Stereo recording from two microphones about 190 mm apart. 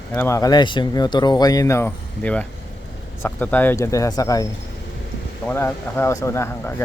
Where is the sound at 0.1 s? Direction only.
15° left (ahead or behind).